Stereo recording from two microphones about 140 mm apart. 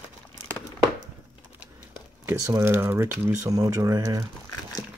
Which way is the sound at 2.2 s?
20° right (ahead or behind).